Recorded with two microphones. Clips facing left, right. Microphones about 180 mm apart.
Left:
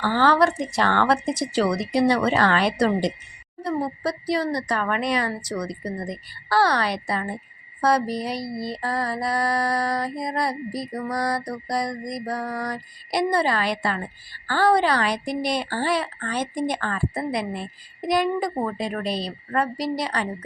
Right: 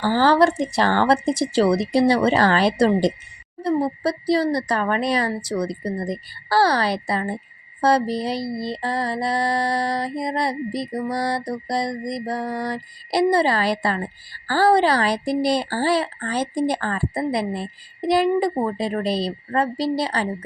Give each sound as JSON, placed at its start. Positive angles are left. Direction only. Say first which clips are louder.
{"t": 0.0, "sound": "speech", "louder": "right 3 dB", "side_deg": -35}
{"t": 7.8, "sound": "mantra", "louder": "right 3 dB", "side_deg": -30}
{"t": 14.4, "sound": "speech", "louder": "right 3 dB", "side_deg": -35}